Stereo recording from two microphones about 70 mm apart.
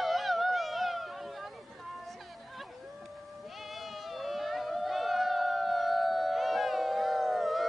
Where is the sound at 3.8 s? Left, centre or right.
Centre.